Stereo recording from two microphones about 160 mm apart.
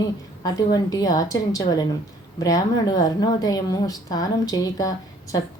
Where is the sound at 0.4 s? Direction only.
25° left (ahead or behind).